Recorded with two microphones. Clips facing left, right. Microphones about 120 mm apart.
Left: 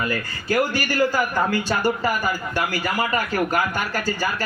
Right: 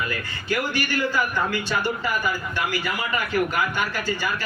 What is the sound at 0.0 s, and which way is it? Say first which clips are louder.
A man's voice: left 4 dB; 40° left (ahead or behind).